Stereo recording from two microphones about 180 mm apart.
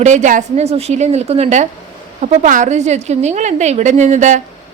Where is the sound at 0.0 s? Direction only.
40° right (ahead or behind).